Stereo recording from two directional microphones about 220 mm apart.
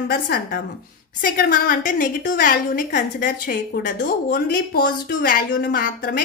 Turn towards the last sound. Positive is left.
turn(degrees=40)  # may be behind; listen again after turning